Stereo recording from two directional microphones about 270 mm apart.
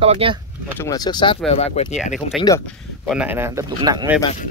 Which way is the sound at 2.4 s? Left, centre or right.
Centre.